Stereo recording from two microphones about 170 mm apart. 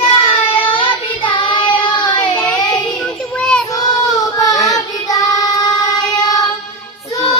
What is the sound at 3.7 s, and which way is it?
Child singing, 20° left (ahead or behind).